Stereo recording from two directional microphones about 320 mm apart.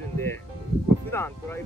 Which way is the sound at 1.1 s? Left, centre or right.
Centre.